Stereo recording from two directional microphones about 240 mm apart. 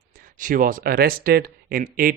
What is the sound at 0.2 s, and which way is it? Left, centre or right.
Speech, right.